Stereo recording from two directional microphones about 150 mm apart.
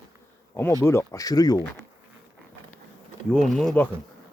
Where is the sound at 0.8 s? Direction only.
15° left (ahead or behind).